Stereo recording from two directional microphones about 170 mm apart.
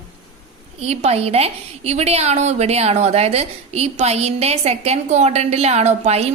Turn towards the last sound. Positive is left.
turn(degrees=-40)  # may be behind; listen again after turning